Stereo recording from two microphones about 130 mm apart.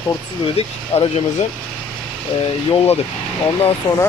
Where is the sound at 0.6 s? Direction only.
50° left (ahead or behind).